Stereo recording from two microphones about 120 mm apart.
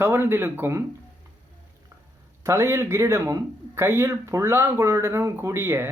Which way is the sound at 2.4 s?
25° right (ahead or behind).